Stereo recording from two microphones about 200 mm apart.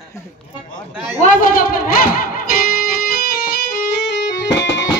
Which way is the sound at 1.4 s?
45° left (ahead or behind).